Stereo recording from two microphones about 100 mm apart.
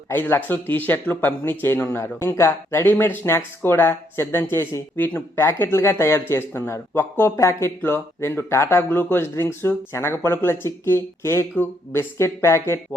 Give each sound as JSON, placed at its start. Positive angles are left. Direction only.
{"t": 0.1, "sound": "speech", "side_deg": 20}